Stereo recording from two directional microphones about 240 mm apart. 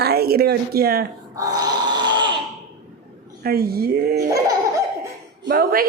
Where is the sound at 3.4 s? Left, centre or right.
Right.